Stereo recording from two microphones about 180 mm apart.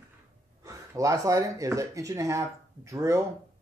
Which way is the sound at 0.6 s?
20° right (ahead or behind).